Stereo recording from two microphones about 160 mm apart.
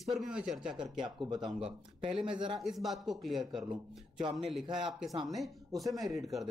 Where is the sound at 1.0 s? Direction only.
25° right (ahead or behind).